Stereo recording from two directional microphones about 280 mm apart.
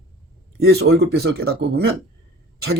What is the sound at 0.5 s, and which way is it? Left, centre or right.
Speech, right.